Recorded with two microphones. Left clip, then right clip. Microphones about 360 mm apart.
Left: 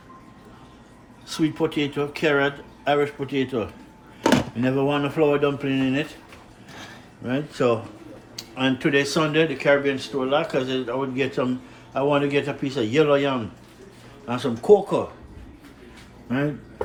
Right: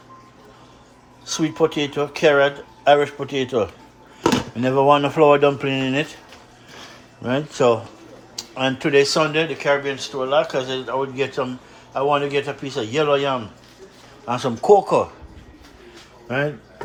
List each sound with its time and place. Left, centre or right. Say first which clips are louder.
1.5 s speech: right 4 dB; centre
7.3 s speech: right 5 dB; centre